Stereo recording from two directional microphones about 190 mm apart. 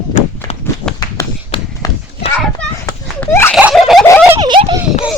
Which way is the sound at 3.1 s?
10° left (ahead or behind).